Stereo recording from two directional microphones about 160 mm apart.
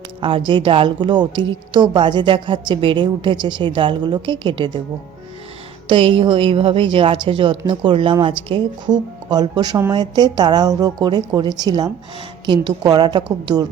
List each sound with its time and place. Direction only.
0.2 s a woman's voice: 35° right (ahead or behind)
5.9 s a woman's voice: 35° right (ahead or behind)